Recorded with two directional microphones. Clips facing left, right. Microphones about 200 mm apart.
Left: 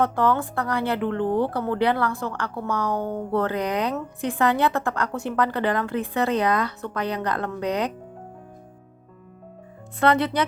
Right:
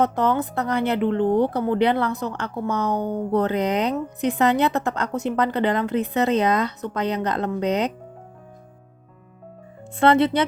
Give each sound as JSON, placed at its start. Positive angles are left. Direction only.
{"t": 0.0, "sound": "speech", "side_deg": -20}
{"t": 10.0, "sound": "speech", "side_deg": -25}